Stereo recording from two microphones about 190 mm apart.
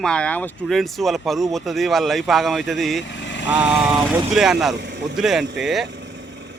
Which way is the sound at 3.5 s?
5° right (ahead or behind).